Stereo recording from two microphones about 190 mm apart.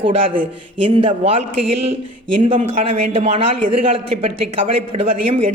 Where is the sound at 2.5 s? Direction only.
30° right (ahead or behind).